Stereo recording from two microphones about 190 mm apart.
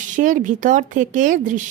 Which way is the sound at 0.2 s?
45° right (ahead or behind).